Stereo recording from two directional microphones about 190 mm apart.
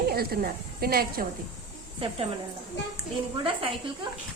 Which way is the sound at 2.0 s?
30° right (ahead or behind).